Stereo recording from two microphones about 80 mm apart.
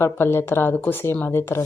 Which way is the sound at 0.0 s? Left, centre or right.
Left.